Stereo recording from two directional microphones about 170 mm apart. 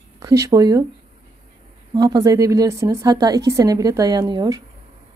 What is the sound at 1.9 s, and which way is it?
A woman's voice, 20° right (ahead or behind).